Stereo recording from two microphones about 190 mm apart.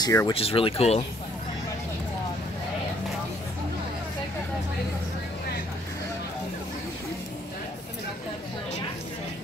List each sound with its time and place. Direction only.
0.0 s speech: 15° left (ahead or behind)
0.3 s speech: 30° left (ahead or behind)